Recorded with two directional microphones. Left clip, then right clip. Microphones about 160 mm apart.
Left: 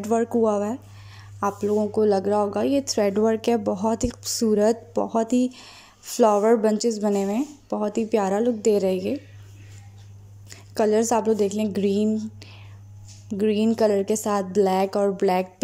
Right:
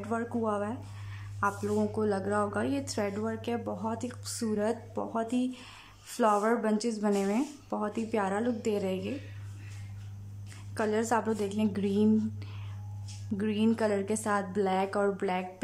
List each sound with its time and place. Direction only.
0.0 s speech: 25° left (ahead or behind)
3.1 s speech: 35° left (ahead or behind)
10.7 s speech: 25° left (ahead or behind)
13.3 s speech: 20° left (ahead or behind)